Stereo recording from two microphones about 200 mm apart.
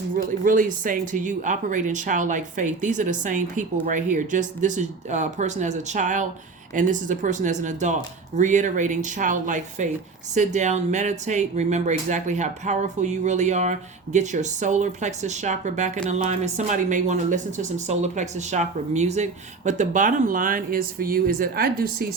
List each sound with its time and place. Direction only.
0.2 s speech: 40° right (ahead or behind)